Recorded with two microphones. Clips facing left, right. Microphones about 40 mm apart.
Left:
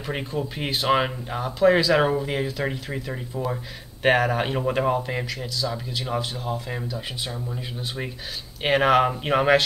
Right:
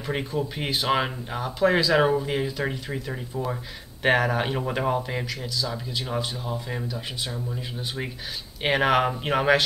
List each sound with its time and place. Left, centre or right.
0.0 s speech: centre